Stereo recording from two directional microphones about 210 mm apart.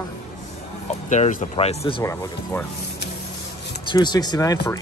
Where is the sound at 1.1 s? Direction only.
35° left (ahead or behind).